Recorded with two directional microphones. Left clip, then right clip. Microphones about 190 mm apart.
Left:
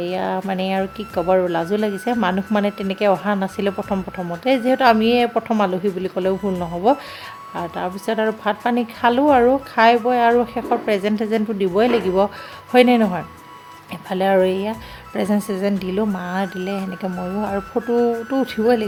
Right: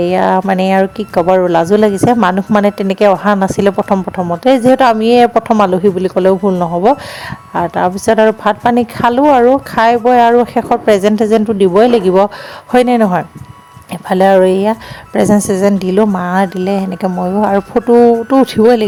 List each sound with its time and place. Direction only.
0.0 s speech: 40° right (ahead or behind)